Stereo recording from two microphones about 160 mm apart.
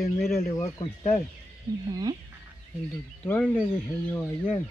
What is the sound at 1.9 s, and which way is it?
Speech, 25° right (ahead or behind).